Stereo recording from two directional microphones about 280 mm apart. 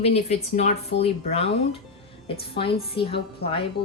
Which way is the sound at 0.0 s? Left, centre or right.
Left.